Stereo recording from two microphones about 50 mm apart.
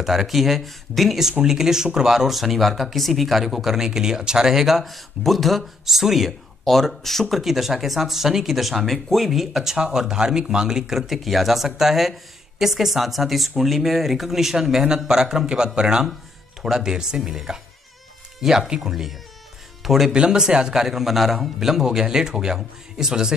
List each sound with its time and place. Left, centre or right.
0.0 s a man's voice: centre